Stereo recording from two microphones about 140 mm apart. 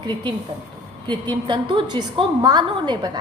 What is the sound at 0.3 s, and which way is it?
A woman's voice, 35° right (ahead or behind).